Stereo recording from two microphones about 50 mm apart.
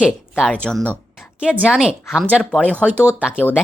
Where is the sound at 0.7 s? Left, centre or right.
Centre.